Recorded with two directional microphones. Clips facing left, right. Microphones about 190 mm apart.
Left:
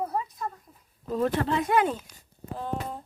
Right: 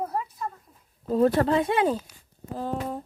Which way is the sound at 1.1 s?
35° right (ahead or behind).